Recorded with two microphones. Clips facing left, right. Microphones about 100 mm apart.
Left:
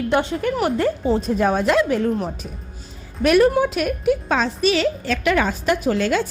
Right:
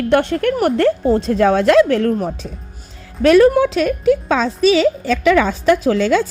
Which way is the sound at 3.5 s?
80° right.